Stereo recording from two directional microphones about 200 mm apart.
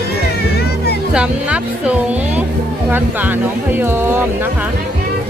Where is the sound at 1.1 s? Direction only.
5° right (ahead or behind).